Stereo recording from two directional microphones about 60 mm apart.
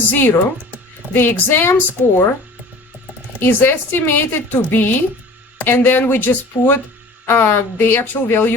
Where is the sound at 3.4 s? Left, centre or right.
Left.